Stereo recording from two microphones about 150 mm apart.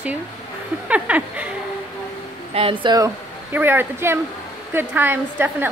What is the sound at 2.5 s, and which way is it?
Speech, 40° right (ahead or behind).